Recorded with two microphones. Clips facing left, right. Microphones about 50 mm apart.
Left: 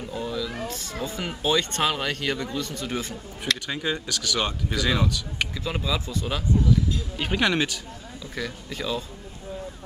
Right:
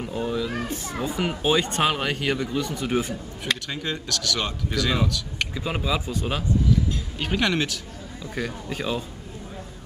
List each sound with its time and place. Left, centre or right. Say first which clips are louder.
0.1 s a child's voice: right 3 dB; right
3.6 s speech: left 2 dB; centre
5.5 s speech: right 4 dB; centre
7.2 s speech: even; centre
8.2 s speech: right 3 dB; right